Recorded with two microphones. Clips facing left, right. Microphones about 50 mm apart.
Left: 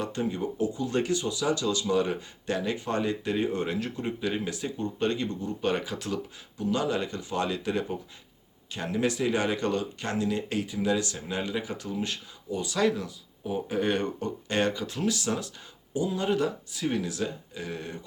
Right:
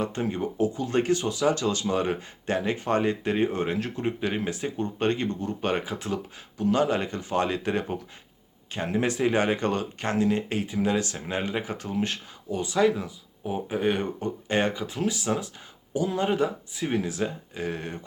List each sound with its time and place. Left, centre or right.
0.0 s speech: right
12.7 s speech: centre
14.2 s speech: right
15.9 s speech: right